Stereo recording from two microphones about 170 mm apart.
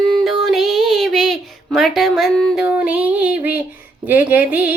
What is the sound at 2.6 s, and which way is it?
Speech, 10° right (ahead or behind).